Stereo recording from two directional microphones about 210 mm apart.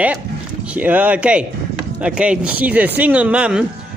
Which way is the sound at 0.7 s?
5° right (ahead or behind).